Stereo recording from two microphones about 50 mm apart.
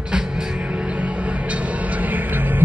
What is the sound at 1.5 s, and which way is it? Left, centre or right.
Music, right.